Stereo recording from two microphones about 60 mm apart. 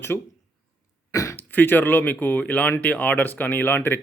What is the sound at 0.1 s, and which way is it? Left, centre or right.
Speech, left.